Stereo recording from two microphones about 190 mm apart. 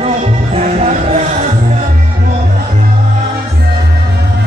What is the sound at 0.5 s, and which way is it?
Music, 35° right (ahead or behind).